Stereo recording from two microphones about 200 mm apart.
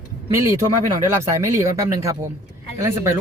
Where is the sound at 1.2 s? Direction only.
15° right (ahead or behind).